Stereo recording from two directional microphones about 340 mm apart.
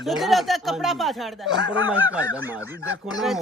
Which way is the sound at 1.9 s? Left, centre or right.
Centre.